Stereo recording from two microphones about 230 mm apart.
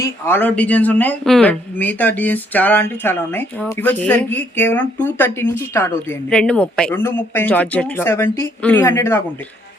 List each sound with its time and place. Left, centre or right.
0.0 s speech: centre